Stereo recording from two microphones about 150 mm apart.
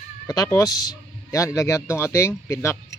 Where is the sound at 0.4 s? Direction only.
20° left (ahead or behind).